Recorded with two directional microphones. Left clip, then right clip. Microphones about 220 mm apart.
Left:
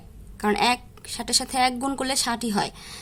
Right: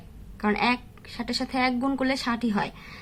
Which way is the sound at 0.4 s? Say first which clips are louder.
Left 3 dB; 55° left (ahead or behind).